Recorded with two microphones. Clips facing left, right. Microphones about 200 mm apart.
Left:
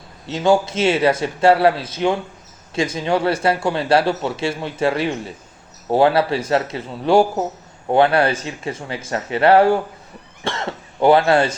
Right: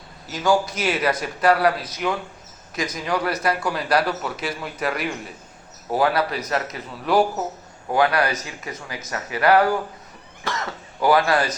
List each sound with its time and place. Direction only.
0.3 s a man's voice: 25° left (ahead or behind)